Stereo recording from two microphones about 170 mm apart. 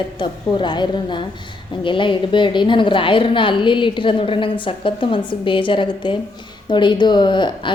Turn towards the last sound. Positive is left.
turn(degrees=30)  # may be behind; listen again after turning